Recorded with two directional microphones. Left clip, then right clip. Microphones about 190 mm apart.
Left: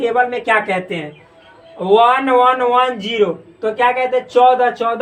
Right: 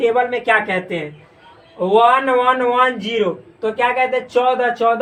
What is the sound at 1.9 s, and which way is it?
A man's voice, 35° left (ahead or behind).